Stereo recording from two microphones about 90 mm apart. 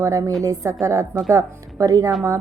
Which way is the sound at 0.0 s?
40° right (ahead or behind).